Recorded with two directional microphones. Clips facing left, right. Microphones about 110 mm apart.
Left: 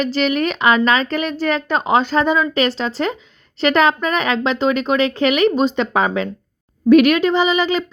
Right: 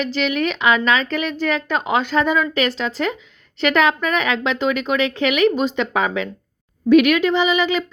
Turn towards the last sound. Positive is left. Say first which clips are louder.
# left 1 dB
turn(degrees=35)  # may be behind; listen again after turning